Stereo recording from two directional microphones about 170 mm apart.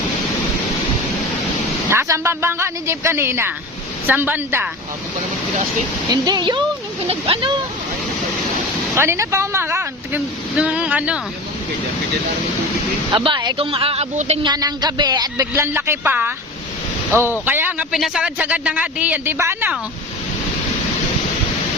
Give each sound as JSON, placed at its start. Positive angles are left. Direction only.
{"t": 1.9, "sound": "a man's voice", "side_deg": -15}
{"t": 6.2, "sound": "a man's voice", "side_deg": -25}
{"t": 9.0, "sound": "speech", "side_deg": -15}
{"t": 13.1, "sound": "speech", "side_deg": -25}
{"t": 14.4, "sound": "a man's voice", "side_deg": -25}